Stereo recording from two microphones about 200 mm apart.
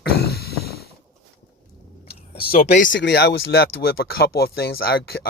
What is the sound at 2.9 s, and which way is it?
Speech, 60° left (ahead or behind).